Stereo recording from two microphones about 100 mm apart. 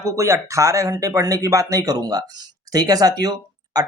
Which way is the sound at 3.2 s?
40° right (ahead or behind).